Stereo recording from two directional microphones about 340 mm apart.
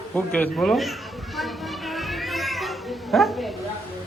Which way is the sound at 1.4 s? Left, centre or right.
Centre.